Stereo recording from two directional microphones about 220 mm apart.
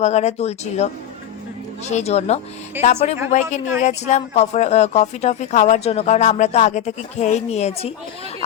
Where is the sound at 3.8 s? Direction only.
30° left (ahead or behind).